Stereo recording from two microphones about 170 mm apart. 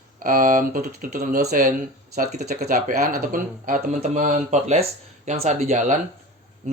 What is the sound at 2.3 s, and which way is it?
Speech, 70° right (ahead or behind).